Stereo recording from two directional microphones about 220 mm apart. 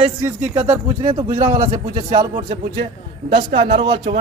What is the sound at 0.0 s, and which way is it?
Speech, 30° right (ahead or behind).